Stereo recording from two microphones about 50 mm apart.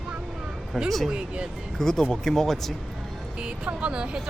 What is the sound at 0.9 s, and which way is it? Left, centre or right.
Speech, centre.